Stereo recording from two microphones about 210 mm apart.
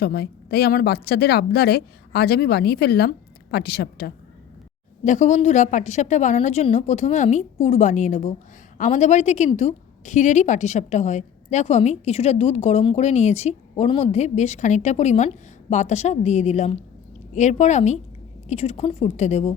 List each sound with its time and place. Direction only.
0.0 s a woman's voice: 50° left (ahead or behind)
5.0 s a woman's voice: 35° left (ahead or behind)